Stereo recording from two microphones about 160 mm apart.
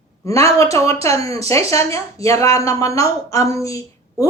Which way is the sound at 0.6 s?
20° left (ahead or behind).